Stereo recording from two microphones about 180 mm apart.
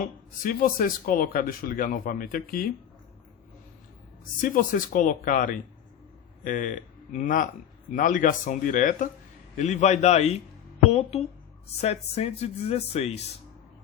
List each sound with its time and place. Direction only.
0.0 s speech: 50° left (ahead or behind)
4.4 s speech: 50° left (ahead or behind)